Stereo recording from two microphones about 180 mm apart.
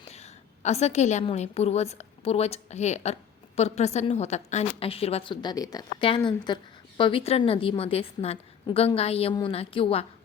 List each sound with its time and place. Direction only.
0.0 s a woman's voice: 35° left (ahead or behind)